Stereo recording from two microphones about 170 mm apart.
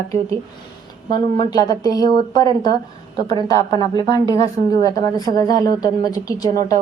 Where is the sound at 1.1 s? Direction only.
25° left (ahead or behind).